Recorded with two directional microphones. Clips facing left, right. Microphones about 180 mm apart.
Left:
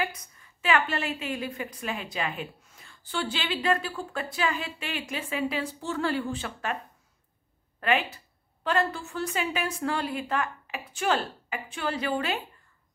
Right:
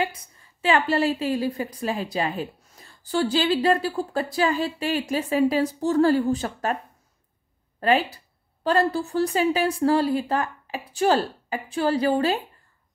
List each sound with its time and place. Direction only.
0.0 s a woman's voice: 30° right (ahead or behind)
7.8 s a woman's voice: 35° right (ahead or behind)